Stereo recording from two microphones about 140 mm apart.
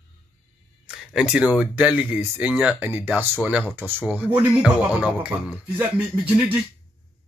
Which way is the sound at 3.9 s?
10° right (ahead or behind).